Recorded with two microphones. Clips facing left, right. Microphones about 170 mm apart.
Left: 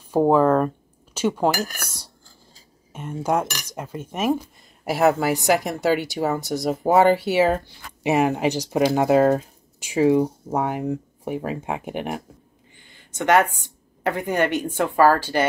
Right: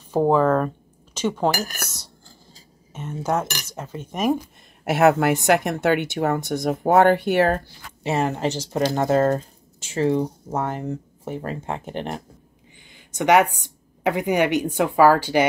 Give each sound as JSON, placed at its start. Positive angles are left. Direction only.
{"t": 0.1, "sound": "speech", "side_deg": 10}
{"t": 2.9, "sound": "speech", "side_deg": 10}
{"t": 8.0, "sound": "speech", "side_deg": 15}
{"t": 12.7, "sound": "a sound", "side_deg": -15}
{"t": 14.0, "sound": "speech", "side_deg": -15}